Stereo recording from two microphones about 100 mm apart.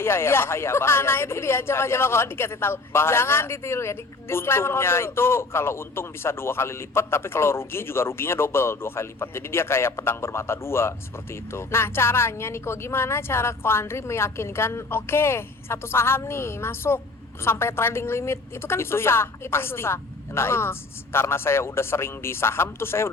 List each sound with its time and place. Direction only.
0.0 s speech: 25° left (ahead or behind)